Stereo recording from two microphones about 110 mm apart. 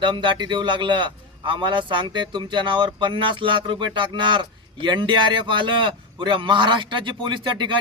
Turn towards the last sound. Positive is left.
turn(degrees=-45)  # may be behind; listen again after turning